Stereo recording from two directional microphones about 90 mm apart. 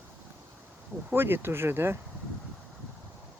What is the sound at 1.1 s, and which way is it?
Speech, 25° right (ahead or behind).